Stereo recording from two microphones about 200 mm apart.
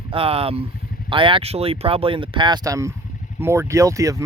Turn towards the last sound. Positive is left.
turn(degrees=-15)  # may be behind; listen again after turning